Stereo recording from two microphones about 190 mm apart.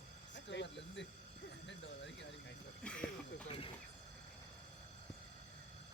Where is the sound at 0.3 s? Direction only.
70° left (ahead or behind).